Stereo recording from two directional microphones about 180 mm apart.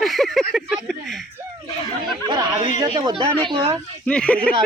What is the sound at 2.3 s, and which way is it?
Speech, 25° right (ahead or behind).